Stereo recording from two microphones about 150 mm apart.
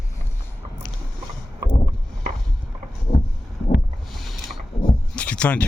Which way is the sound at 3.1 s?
90° left.